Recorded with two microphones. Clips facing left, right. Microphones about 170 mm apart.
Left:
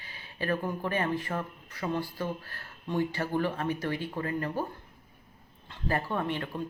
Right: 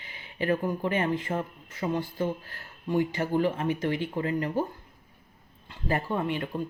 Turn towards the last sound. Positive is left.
turn(degrees=-15)  # may be behind; listen again after turning